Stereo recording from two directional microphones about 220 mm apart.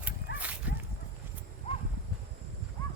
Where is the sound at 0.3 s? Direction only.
50° left (ahead or behind).